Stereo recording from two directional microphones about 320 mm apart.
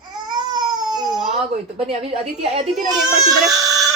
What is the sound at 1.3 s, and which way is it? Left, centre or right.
A woman's voice, centre.